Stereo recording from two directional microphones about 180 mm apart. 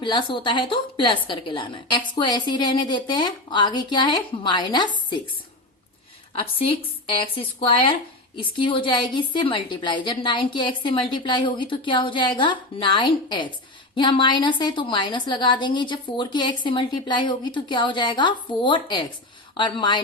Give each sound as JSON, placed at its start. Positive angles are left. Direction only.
{"t": 0.0, "sound": "a woman's voice", "side_deg": 25}
{"t": 7.3, "sound": "a woman's voice", "side_deg": 30}